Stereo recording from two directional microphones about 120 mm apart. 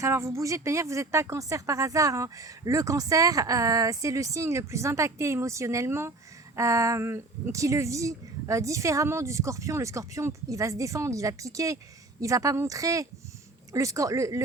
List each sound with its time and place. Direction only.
0.0 s speech: 25° right (ahead or behind)